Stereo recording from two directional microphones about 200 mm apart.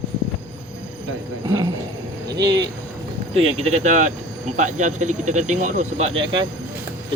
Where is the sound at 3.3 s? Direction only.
30° right (ahead or behind).